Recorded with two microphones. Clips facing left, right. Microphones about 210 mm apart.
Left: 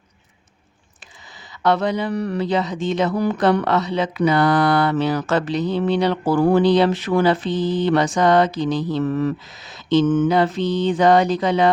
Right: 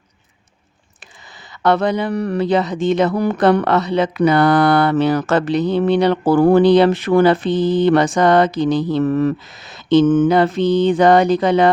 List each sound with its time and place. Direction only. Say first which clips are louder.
1.6 s speech: right 3 dB; 55° right (ahead or behind)